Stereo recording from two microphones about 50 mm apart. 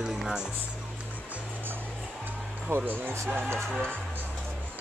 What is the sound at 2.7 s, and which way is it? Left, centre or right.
Speech, right.